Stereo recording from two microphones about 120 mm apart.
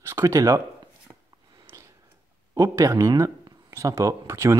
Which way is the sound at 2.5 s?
25° right (ahead or behind).